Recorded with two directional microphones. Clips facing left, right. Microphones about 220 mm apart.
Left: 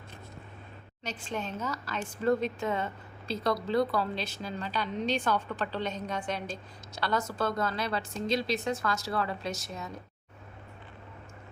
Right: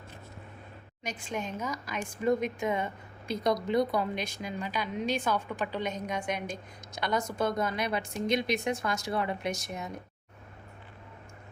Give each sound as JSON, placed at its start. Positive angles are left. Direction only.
{"t": 1.0, "sound": "a woman's voice", "side_deg": -10}